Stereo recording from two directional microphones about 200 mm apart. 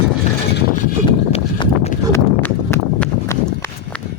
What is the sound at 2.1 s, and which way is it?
Horse, 10° left (ahead or behind).